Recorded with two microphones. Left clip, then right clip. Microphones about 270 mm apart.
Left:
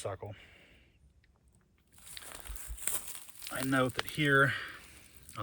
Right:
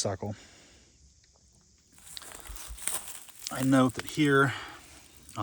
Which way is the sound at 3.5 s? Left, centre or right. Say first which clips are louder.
Right 5 dB; right.